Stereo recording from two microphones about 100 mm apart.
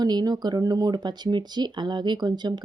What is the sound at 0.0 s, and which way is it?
Speech, 45° right (ahead or behind).